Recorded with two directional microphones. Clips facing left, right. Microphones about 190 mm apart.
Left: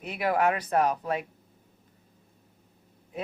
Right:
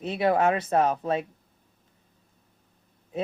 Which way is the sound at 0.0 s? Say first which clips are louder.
Right 3 dB; 25° right (ahead or behind).